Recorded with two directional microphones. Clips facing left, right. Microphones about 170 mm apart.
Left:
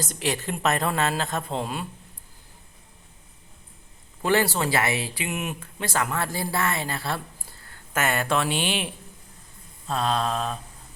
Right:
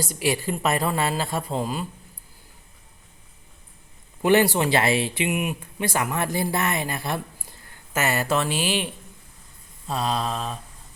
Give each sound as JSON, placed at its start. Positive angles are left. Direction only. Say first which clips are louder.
{"t": 0.1, "sound": "a woman's voice", "louder": "right 4 dB", "side_deg": -10}
{"t": 4.2, "sound": "a woman's voice", "louder": "right 4 dB", "side_deg": -15}